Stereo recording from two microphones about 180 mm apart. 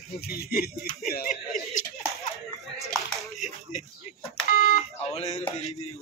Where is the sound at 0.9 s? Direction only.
50° left (ahead or behind).